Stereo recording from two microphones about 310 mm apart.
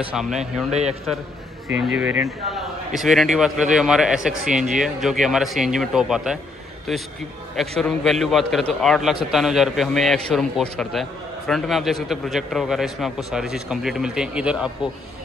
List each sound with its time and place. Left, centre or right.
0.1 s a man's voice: centre
0.7 s a man's voice: right
1.7 s a man's voice: centre